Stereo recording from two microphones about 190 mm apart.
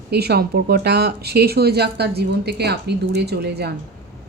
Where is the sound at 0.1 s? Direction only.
55° right (ahead or behind).